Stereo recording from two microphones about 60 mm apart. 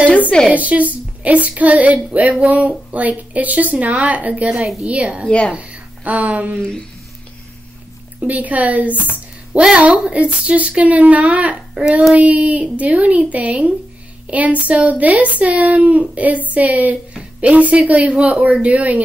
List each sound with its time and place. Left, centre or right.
0.1 s a sound: left
0.5 s speech: right
8.2 s speech: right
8.9 s speech: left
9.5 s speech: centre
11.7 s child singing: centre
12.2 s speech: right